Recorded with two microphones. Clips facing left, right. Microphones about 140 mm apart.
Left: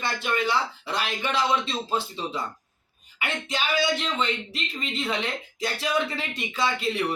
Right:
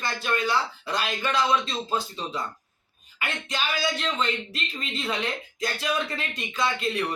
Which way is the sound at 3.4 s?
25° left (ahead or behind).